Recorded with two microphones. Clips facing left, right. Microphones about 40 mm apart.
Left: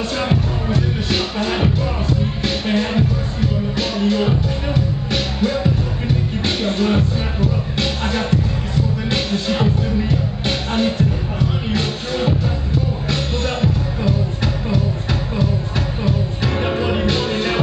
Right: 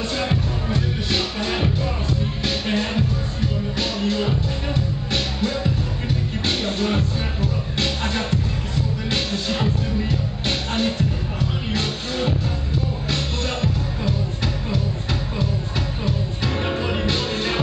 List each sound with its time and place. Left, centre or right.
0.2 s music: centre
16.6 s music: centre